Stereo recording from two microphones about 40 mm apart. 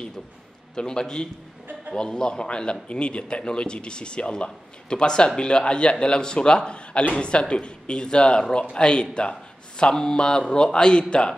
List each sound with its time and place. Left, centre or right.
0.7 s a man's voice: centre